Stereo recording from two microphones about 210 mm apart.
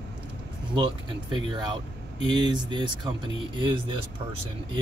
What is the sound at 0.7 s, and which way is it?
Speech, 20° right (ahead or behind).